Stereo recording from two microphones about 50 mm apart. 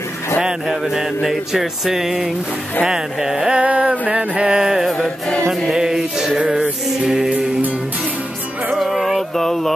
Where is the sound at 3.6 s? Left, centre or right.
Right; by 7.2 s centre.